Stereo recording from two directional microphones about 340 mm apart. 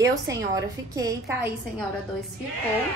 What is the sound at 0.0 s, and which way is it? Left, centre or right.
A woman's voice, centre.